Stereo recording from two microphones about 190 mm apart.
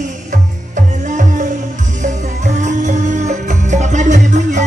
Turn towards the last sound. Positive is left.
turn(degrees=-40)  # may be behind; listen again after turning